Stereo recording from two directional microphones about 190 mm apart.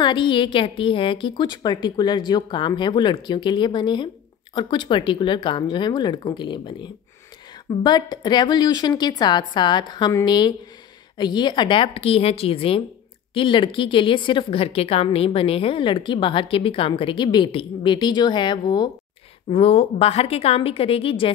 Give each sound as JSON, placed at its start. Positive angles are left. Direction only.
{"t": 0.0, "sound": "a woman's voice", "side_deg": 25}